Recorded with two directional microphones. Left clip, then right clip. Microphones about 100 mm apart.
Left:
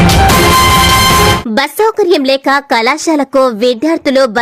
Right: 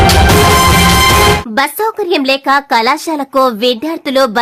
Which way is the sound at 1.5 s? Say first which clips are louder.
Left 2 dB; 30° left (ahead or behind).